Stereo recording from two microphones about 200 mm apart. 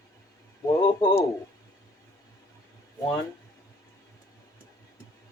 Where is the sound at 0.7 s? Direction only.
20° left (ahead or behind).